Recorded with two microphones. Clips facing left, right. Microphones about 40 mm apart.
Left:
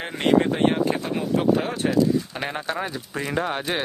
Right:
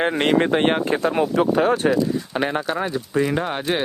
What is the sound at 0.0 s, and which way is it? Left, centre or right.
Speech, right.